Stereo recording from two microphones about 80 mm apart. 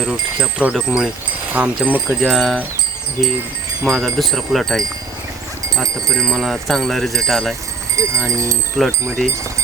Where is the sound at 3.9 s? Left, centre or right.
Centre.